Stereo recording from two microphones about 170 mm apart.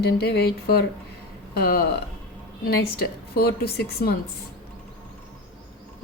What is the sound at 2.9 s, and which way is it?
A woman's voice, 65° left (ahead or behind).